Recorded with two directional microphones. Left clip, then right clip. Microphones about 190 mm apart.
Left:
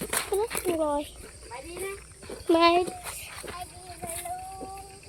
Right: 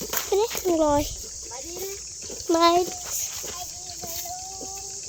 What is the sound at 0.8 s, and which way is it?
Speech, 40° right (ahead or behind).